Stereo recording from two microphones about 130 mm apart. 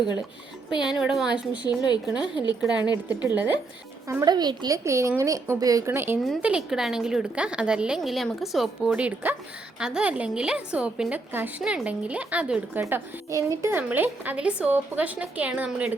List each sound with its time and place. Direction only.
0.8 s a woman's voice: 5° right (ahead or behind)
1.6 s a woman's voice: 35° left (ahead or behind)
2.6 s a woman's voice: 10° right (ahead or behind)
4.1 s speech: 30° right (ahead or behind)
6.4 s a woman's voice: 5° right (ahead or behind)
12.8 s a woman's voice: 25° right (ahead or behind)